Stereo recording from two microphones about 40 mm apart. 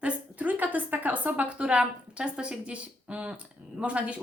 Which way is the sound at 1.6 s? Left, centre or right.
Right.